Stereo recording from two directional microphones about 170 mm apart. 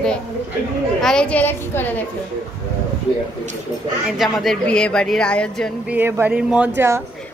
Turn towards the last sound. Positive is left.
turn(degrees=-15)  # may be behind; listen again after turning